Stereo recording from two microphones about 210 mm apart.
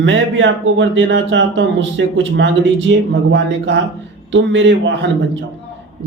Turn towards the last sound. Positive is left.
turn(degrees=-60)  # may be behind; listen again after turning